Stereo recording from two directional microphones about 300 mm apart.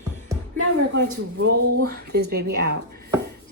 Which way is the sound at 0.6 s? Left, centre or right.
Right.